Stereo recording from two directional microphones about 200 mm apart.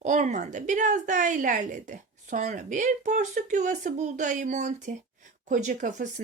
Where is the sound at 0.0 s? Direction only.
35° right (ahead or behind).